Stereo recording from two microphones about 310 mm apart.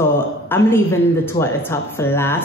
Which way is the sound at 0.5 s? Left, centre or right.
Centre.